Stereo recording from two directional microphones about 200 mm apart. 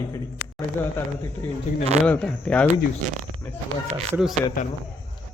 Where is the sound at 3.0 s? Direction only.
40° right (ahead or behind).